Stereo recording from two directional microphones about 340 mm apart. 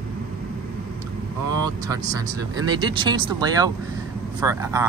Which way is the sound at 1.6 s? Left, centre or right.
Centre.